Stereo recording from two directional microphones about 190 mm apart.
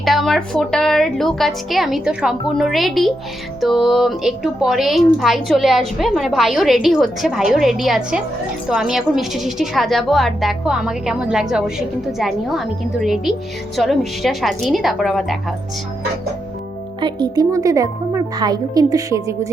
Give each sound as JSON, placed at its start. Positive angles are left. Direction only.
{"t": 0.0, "sound": "a woman's voice", "side_deg": 0}
{"t": 17.0, "sound": "a woman's voice", "side_deg": -20}